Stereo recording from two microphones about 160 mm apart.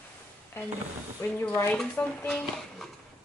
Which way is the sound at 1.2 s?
10° left (ahead or behind).